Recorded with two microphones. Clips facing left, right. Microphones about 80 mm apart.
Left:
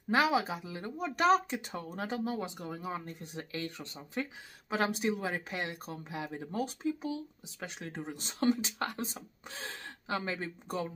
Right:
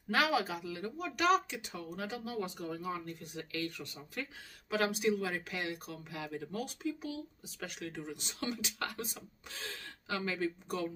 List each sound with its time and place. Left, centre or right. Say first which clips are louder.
0.1 s speech: left 3 dB; left
2.4 s speech: even; left